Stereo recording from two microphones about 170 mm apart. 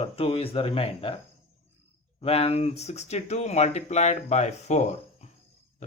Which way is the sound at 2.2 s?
35° left (ahead or behind).